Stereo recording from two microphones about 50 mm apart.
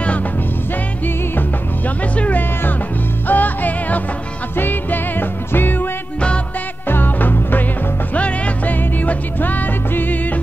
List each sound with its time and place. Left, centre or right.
2.1 s music: left
6.9 s music: left
8.1 s music: left